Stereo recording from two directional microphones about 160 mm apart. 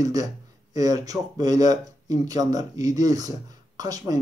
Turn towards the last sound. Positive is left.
turn(degrees=-25)  # may be behind; listen again after turning